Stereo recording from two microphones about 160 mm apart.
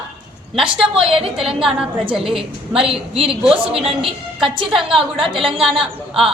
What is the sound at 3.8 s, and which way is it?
Speech, centre (ahead or behind).